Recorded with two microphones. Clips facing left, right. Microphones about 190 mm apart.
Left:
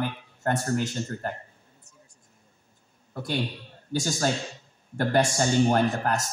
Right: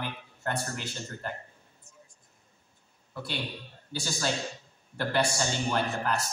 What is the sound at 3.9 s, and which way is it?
A man's voice, 45° left (ahead or behind).